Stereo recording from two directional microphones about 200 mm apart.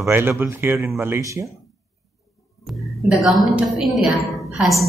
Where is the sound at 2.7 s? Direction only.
Centre (ahead or behind).